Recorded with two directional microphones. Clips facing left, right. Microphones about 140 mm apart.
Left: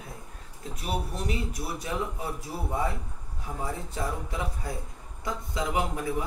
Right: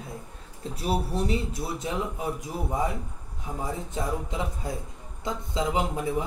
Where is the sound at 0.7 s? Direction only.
30° right (ahead or behind).